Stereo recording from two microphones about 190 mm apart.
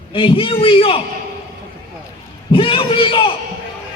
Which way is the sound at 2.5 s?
25° left (ahead or behind).